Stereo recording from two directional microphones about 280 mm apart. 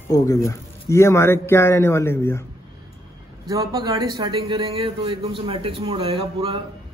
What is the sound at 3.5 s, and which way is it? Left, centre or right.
A man's voice, centre.